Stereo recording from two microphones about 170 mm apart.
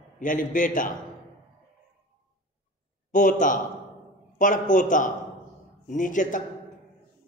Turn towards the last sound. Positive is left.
turn(degrees=50)  # may be behind; listen again after turning